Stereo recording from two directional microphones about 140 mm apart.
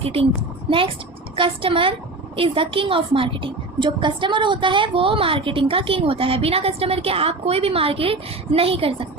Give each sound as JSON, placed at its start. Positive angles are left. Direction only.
{"t": 0.0, "sound": "a woman's voice", "side_deg": -40}
{"t": 1.4, "sound": "a woman's voice", "side_deg": -40}